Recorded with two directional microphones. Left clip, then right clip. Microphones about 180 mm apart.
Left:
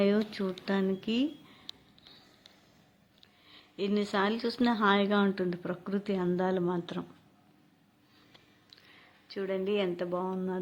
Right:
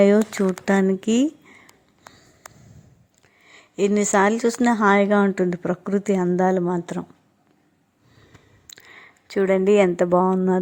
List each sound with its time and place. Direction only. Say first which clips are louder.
0.0 s speech: right 12 dB; 35° right (ahead or behind)
3.5 s speech: right 11 dB; 40° right (ahead or behind)
8.7 s speech: right 12 dB; 45° right (ahead or behind)